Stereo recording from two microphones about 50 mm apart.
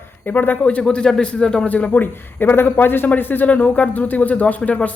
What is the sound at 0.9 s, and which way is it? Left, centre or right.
Speech, centre.